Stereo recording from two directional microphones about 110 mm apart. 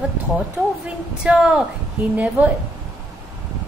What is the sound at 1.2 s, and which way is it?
A woman's voice, 10° right (ahead or behind).